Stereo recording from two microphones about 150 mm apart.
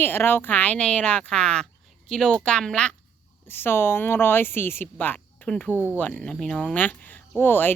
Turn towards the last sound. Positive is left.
turn(degrees=15)  # may be behind; listen again after turning